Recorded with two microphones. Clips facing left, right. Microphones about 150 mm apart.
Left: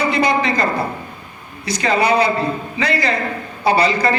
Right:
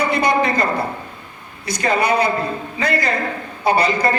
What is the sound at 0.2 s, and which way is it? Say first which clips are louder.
Speech: even; 55° right (ahead or behind).